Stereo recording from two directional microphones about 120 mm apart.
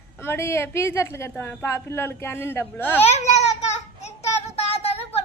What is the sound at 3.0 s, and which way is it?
Child singing, 65° left (ahead or behind).